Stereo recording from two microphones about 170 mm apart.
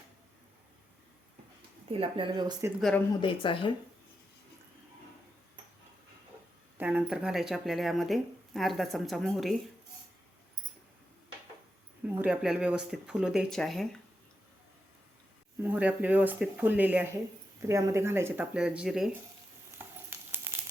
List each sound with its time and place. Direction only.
1.9 s speech: 30° right (ahead or behind)
3.2 s speech: 30° left (ahead or behind)
6.7 s speech: 10° right (ahead or behind)
12.0 s speech: 10° right (ahead or behind)
15.6 s speech: 10° right (ahead or behind)